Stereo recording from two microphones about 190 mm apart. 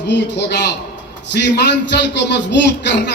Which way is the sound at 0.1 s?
65° left (ahead or behind).